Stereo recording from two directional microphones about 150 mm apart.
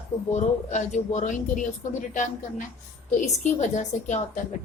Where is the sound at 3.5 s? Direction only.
50° left (ahead or behind).